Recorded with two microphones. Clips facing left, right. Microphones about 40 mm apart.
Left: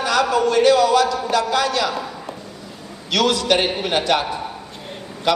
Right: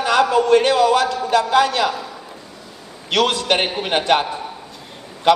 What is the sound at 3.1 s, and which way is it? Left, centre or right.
A man's voice, right.